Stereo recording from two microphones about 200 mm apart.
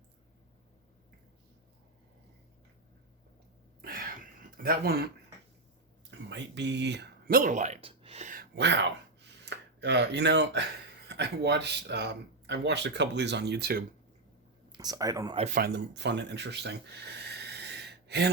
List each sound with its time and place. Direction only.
3.8 s a sound: 45° right (ahead or behind)
4.5 s speech: 45° right (ahead or behind)
6.1 s speech: 60° right (ahead or behind); by 8.4 s 40° right (ahead or behind)
8.5 s speech: 60° right (ahead or behind)
14.7 s speech: 20° right (ahead or behind)
15.5 s speech: 55° right (ahead or behind)